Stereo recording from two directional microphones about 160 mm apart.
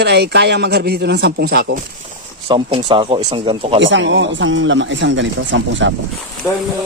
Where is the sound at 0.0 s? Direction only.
90° right.